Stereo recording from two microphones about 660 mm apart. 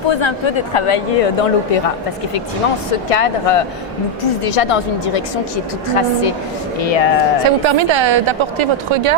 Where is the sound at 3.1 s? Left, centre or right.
Left.